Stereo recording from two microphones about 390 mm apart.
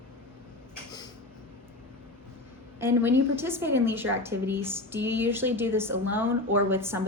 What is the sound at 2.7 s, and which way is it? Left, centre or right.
A woman's voice, centre.